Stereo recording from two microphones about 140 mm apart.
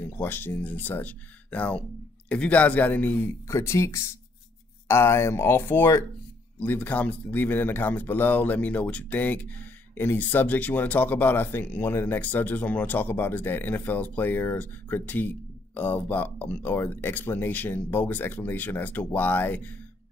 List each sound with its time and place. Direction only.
0.0 s speech: 15° left (ahead or behind)